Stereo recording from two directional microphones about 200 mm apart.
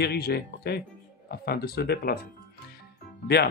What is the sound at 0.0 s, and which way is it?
Speech, 55° left (ahead or behind).